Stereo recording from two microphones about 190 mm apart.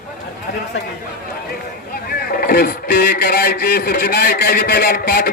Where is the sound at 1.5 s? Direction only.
50° left (ahead or behind).